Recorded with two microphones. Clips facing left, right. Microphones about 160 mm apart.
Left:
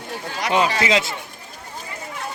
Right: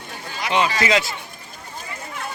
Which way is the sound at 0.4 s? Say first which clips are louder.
Left 1 dB; 40° left (ahead or behind).